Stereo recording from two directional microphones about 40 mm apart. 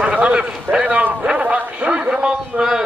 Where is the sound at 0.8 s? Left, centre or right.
Right.